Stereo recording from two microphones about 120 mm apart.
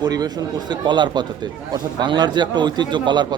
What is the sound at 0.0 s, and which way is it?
A man's voice, 35° right (ahead or behind).